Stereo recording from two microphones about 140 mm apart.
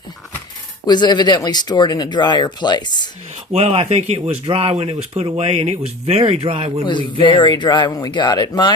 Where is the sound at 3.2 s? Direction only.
50° right (ahead or behind).